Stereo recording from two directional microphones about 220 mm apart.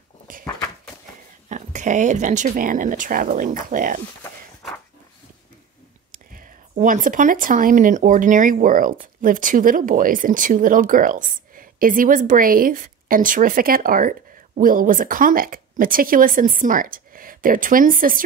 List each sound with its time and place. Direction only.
1.5 s speech: 35° right (ahead or behind)
6.1 s speech: 35° right (ahead or behind)